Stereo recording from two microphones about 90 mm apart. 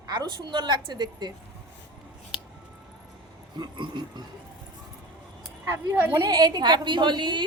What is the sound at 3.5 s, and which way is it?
Speech, 55° right (ahead or behind).